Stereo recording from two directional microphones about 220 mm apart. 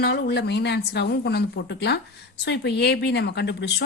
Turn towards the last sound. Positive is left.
turn(degrees=50)  # may be behind; listen again after turning